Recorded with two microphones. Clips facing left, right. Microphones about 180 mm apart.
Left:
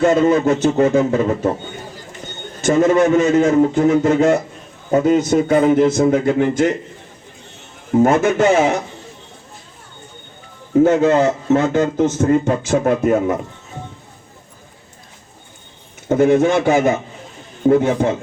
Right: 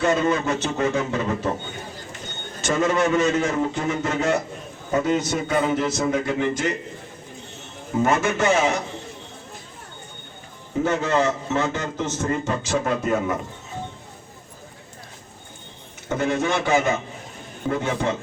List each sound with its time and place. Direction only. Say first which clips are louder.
0.0 s a man's voice: left 7 dB; 50° left (ahead or behind)
2.6 s a man's voice: left 8 dB; 50° left (ahead or behind)
8.0 s a man's voice: left 6 dB; 50° left (ahead or behind)
10.8 s a man's voice: left 6 dB; 50° left (ahead or behind)
16.0 s a man's voice: left 10 dB; 50° left (ahead or behind)